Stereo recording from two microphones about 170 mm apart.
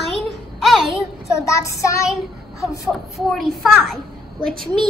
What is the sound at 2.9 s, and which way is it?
A woman's voice, centre (ahead or behind).